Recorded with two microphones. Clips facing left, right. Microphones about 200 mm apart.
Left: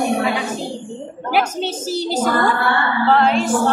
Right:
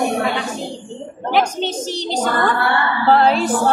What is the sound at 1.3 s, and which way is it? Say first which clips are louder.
Speech: right 1 dB; 5° left (ahead or behind).